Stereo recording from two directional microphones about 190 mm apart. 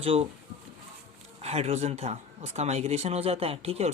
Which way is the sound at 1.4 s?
35° right (ahead or behind).